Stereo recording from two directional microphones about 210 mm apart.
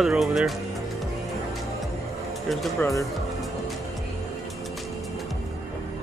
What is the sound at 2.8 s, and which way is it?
Speech, 15° left (ahead or behind).